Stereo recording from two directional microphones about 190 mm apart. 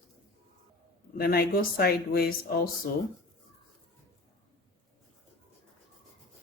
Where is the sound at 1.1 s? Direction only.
50° left (ahead or behind).